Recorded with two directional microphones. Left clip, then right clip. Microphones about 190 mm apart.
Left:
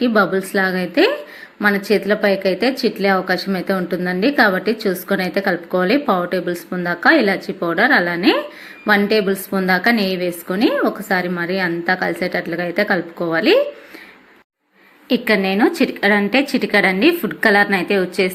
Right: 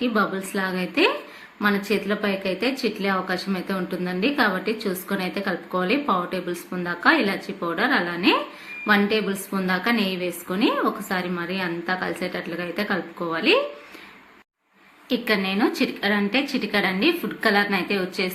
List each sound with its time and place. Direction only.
0.0 s a woman's voice: 30° left (ahead or behind)
15.1 s a woman's voice: 30° left (ahead or behind)